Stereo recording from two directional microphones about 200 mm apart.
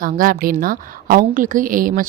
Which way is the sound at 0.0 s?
45° right (ahead or behind).